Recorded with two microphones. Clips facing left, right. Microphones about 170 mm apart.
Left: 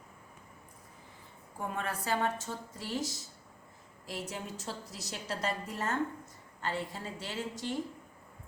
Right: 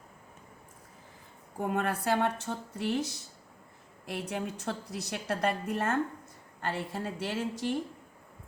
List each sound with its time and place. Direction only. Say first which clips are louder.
1.7 s a woman's voice: right 5 dB; 65° right (ahead or behind)